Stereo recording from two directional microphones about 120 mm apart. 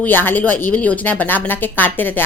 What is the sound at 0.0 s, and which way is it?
A woman's voice, 15° left (ahead or behind).